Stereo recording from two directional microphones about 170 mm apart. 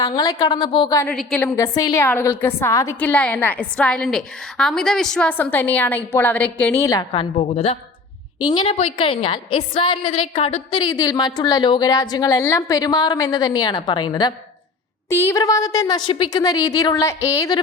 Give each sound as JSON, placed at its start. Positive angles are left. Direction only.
{"t": 0.0, "sound": "a woman's voice", "side_deg": 20}
{"t": 0.9, "sound": "a woman's voice", "side_deg": 5}
{"t": 1.4, "sound": "a woman's voice", "side_deg": 15}
{"t": 7.1, "sound": "a woman's voice", "side_deg": 35}